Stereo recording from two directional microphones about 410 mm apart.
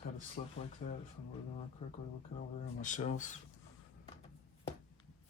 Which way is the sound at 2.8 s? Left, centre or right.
Centre.